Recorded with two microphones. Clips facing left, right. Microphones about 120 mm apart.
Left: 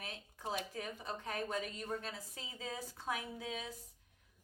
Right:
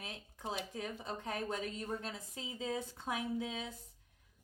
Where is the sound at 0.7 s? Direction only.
25° right (ahead or behind).